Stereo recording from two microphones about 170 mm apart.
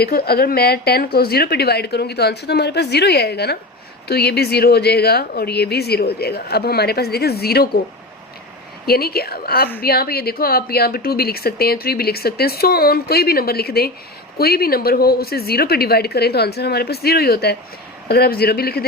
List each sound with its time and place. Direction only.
0.0 s speech: 65° left (ahead or behind)
8.9 s a woman's voice: 65° left (ahead or behind)